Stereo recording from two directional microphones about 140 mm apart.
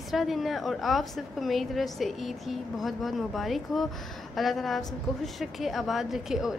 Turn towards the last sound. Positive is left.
turn(degrees=0)  # may be behind; listen again after turning